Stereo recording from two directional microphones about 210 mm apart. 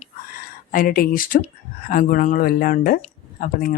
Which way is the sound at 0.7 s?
45° left (ahead or behind).